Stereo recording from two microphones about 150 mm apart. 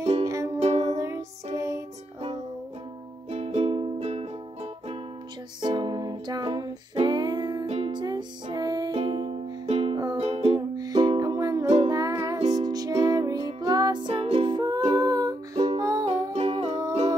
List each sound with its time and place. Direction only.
0.2 s music: 20° right (ahead or behind)
0.6 s music: 45° right (ahead or behind)
0.9 s music: 20° right (ahead or behind)
3.3 s music: 45° right (ahead or behind)
5.6 s music: 30° right (ahead or behind)
7.6 s music: 40° right (ahead or behind)
10.8 s music: 25° right (ahead or behind)
11.6 s music: 45° right (ahead or behind)
11.9 s music: 25° right (ahead or behind)
14.8 s humming: 40° right (ahead or behind)
15.0 s music: 25° right (ahead or behind)
16.1 s music: 45° right (ahead or behind)